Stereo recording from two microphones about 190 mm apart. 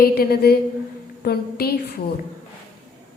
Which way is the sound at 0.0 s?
55° left (ahead or behind).